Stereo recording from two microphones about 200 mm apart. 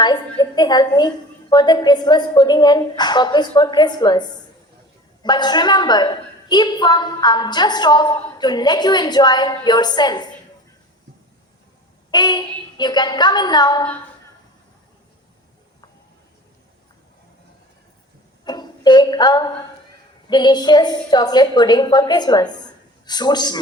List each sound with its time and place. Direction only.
0.3 s a woman's voice: 20° left (ahead or behind)
12.1 s a woman's voice: 20° left (ahead or behind)
18.4 s a sound: 20° left (ahead or behind)
20.2 s a woman's voice: 20° left (ahead or behind)